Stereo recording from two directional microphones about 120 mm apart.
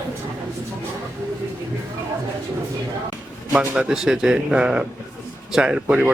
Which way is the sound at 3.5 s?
10° right (ahead or behind).